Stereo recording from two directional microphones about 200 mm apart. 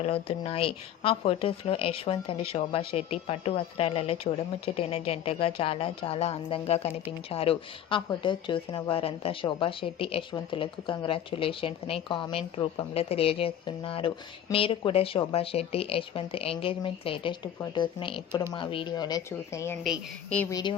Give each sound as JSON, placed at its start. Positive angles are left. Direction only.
{"t": 0.0, "sound": "speech", "side_deg": 30}
{"t": 19.8, "sound": "a woman's voice", "side_deg": 5}
{"t": 20.5, "sound": "speech", "side_deg": 20}